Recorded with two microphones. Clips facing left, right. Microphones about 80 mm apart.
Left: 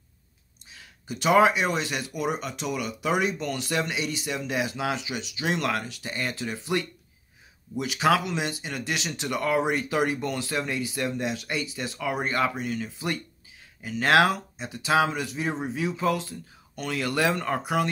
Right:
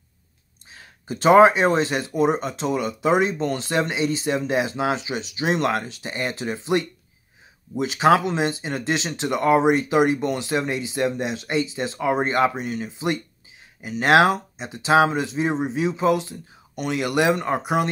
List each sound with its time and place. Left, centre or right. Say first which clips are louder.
0.7 s speech: right 5 dB; right